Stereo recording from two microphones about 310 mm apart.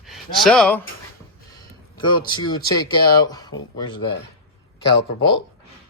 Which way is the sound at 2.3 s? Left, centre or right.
Centre.